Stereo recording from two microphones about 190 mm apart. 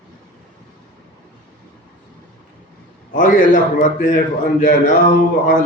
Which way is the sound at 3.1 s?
45° left (ahead or behind).